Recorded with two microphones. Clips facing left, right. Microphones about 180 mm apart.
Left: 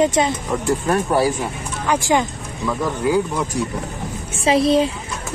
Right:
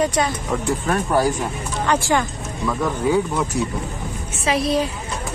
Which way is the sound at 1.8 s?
15° left (ahead or behind).